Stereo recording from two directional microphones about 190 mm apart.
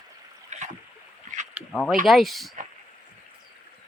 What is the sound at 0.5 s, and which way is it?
Rowboat, 40° right (ahead or behind).